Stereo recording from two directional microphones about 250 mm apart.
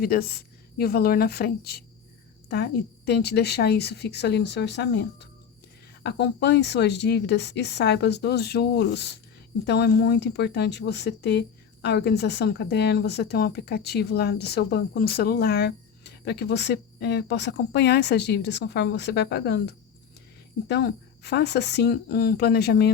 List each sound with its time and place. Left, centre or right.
0.0 s speech: left
3.1 s speech: left